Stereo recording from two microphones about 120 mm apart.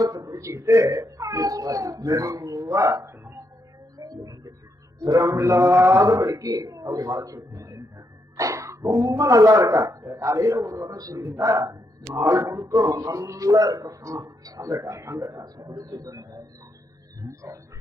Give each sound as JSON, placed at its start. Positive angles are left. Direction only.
{"t": 0.0, "sound": "a child's voice", "side_deg": -30}
{"t": 3.9, "sound": "music", "side_deg": -30}
{"t": 5.0, "sound": "speech", "side_deg": -25}